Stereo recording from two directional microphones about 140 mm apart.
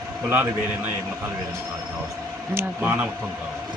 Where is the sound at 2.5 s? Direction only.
15° right (ahead or behind).